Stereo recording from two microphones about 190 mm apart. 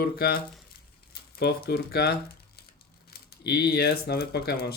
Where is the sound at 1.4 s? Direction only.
55° left (ahead or behind).